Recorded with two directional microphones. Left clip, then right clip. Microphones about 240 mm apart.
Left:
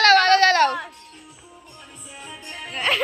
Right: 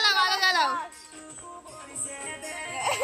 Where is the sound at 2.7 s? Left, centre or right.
Right.